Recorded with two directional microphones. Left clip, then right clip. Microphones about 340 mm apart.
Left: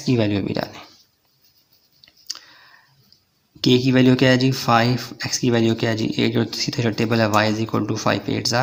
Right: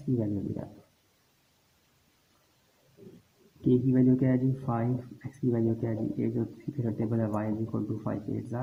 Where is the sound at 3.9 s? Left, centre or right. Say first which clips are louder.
Left 10 dB; left.